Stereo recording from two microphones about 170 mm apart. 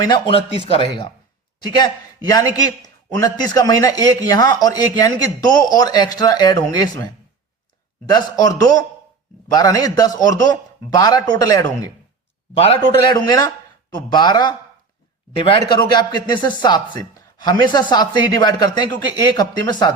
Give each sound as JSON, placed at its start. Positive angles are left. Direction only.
{"t": 0.0, "sound": "a man's voice", "side_deg": 30}
{"t": 8.1, "sound": "a man's voice", "side_deg": 20}
{"t": 12.5, "sound": "a man's voice", "side_deg": 35}
{"t": 15.7, "sound": "a man's voice", "side_deg": 25}